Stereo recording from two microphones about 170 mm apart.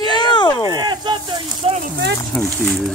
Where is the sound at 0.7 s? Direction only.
25° right (ahead or behind).